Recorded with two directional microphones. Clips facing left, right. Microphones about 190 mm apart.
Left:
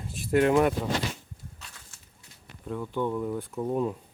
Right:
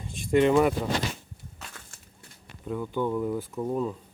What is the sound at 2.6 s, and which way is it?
Speech, centre (ahead or behind).